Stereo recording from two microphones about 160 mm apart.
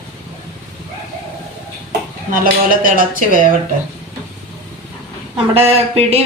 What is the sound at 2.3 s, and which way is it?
A woman's voice, 60° right (ahead or behind).